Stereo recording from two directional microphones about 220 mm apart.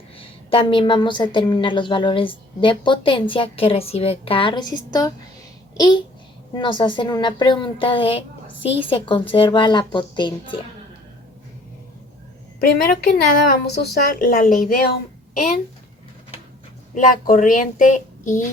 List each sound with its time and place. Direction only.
0.2 s a woman's voice: 25° left (ahead or behind)
12.5 s a woman's voice: 45° left (ahead or behind)
16.9 s speech: 35° left (ahead or behind)